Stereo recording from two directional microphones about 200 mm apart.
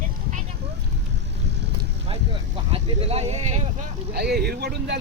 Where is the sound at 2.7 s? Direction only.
30° right (ahead or behind).